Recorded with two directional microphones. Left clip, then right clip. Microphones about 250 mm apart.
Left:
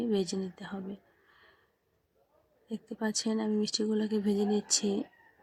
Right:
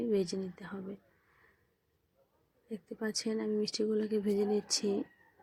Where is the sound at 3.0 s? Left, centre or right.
Centre.